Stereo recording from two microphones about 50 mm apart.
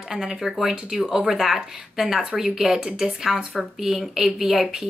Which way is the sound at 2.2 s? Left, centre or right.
Centre.